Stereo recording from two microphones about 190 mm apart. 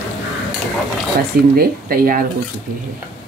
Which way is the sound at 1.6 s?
50° right (ahead or behind).